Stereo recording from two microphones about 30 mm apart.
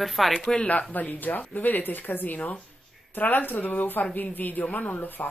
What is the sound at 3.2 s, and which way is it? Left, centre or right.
Speech, left.